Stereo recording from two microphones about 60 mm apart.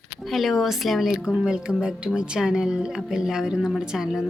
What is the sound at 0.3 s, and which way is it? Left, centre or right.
Speech, centre.